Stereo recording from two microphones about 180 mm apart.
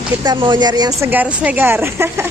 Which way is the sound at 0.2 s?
25° right (ahead or behind).